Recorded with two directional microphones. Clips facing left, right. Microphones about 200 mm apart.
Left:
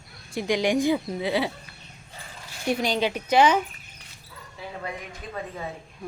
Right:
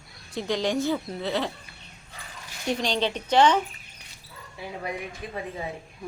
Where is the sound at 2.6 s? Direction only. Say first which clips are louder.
Left 2 dB; 10° left (ahead or behind).